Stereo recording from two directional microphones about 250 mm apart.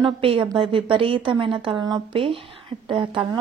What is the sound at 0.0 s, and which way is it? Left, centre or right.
A woman's voice, right.